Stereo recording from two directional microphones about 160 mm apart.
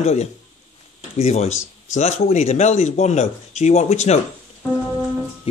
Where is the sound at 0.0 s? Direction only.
45° left (ahead or behind).